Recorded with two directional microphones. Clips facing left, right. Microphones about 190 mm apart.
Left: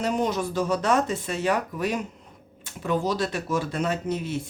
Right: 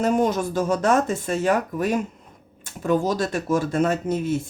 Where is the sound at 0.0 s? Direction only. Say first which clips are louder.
Right 5 dB; 50° right (ahead or behind).